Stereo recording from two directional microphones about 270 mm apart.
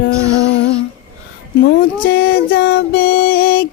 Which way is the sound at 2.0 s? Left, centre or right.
Left.